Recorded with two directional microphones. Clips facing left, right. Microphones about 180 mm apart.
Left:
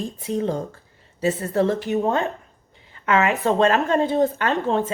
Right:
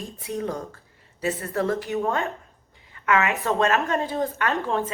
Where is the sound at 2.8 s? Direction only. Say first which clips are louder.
Left 3 dB; 30° left (ahead or behind).